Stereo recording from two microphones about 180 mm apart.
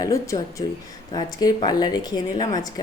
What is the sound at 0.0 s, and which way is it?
A woman's voice, 15° left (ahead or behind).